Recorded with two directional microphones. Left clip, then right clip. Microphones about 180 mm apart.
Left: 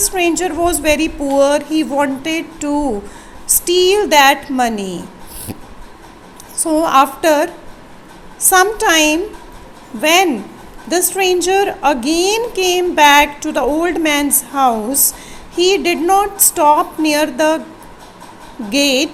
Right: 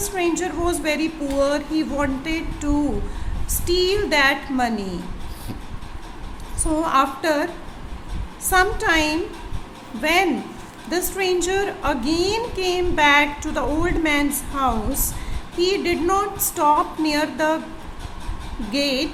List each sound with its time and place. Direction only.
0.0 s a woman's voice: 35° left (ahead or behind)
6.6 s a woman's voice: 30° left (ahead or behind)
18.7 s a woman's voice: 35° left (ahead or behind)